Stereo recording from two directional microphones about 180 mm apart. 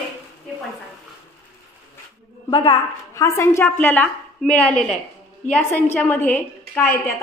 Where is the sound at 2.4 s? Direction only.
30° left (ahead or behind).